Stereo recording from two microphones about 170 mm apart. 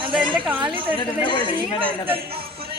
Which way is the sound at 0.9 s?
30° left (ahead or behind).